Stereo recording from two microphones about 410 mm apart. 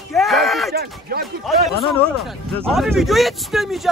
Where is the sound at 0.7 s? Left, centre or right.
Right.